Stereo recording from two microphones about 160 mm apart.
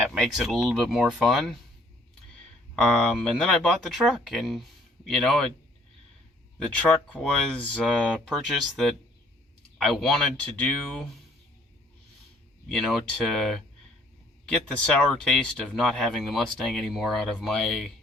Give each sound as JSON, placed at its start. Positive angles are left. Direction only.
{"t": 0.1, "sound": "speech", "side_deg": 0}
{"t": 2.8, "sound": "speech", "side_deg": 5}
{"t": 6.6, "sound": "speech", "side_deg": 5}
{"t": 12.6, "sound": "speech", "side_deg": 0}